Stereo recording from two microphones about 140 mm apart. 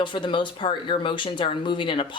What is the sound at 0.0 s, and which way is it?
Speech, 35° left (ahead or behind).